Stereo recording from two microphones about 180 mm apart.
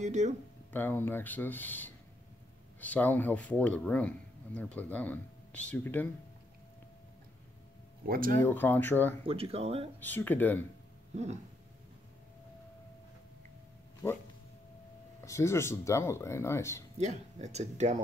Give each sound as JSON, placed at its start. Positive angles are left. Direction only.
{"t": 0.0, "sound": "speech", "side_deg": -40}
{"t": 0.7, "sound": "speech", "side_deg": 10}
{"t": 8.1, "sound": "speech", "side_deg": -50}
{"t": 8.4, "sound": "speech", "side_deg": 10}
{"t": 9.2, "sound": "speech", "side_deg": -35}
{"t": 9.9, "sound": "speech", "side_deg": 10}
{"t": 11.1, "sound": "speech", "side_deg": -40}
{"t": 15.2, "sound": "speech", "side_deg": 15}
{"t": 17.0, "sound": "speech", "side_deg": -40}